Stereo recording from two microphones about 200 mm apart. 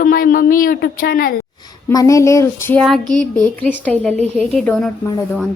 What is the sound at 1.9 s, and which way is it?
A woman's voice, 15° left (ahead or behind).